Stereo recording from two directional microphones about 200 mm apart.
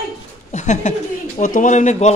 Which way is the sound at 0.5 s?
35° left (ahead or behind).